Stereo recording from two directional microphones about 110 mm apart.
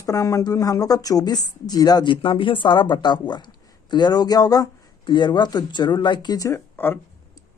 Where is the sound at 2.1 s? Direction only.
50° left (ahead or behind); by 7.0 s 20° left (ahead or behind).